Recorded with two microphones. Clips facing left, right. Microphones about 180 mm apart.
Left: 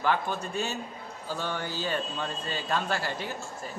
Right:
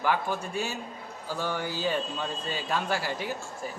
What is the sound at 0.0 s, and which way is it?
Speech, 10° right (ahead or behind).